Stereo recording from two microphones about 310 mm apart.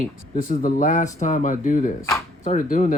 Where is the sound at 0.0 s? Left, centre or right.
Left.